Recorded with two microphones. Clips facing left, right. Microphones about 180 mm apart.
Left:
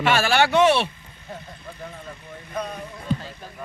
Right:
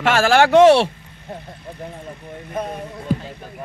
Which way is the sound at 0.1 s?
90° right.